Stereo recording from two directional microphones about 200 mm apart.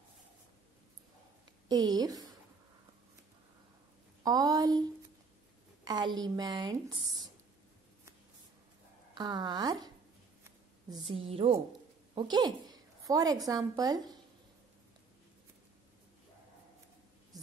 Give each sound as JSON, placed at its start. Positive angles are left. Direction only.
{"t": 1.7, "sound": "a woman's voice", "side_deg": -20}
{"t": 4.2, "sound": "a woman's voice", "side_deg": -20}
{"t": 5.9, "sound": "a woman's voice", "side_deg": -20}
{"t": 9.1, "sound": "a woman's voice", "side_deg": -20}
{"t": 10.9, "sound": "a woman's voice", "side_deg": -25}